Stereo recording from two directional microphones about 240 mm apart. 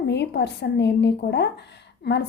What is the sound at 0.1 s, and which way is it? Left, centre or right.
A woman's voice, left.